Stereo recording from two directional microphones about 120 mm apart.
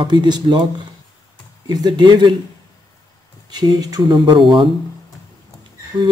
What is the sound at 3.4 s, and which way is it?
Speech, 35° right (ahead or behind).